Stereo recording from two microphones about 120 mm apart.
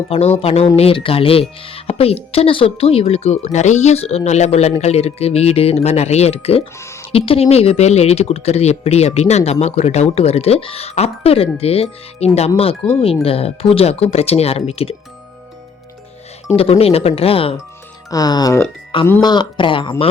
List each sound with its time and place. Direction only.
0.1 s speech: 55° left (ahead or behind)
6.7 s music: 25° left (ahead or behind)
7.1 s speech: 55° left (ahead or behind)
16.6 s speech: 55° left (ahead or behind)
18.1 s speech: 35° left (ahead or behind)